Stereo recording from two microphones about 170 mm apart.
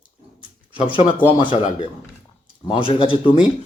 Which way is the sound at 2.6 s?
30° left (ahead or behind).